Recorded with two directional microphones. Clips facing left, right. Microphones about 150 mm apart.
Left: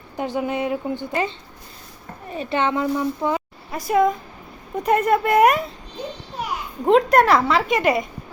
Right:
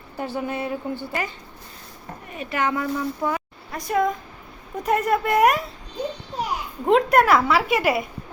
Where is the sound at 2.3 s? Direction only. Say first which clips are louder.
Left 3 dB; 30° left (ahead or behind).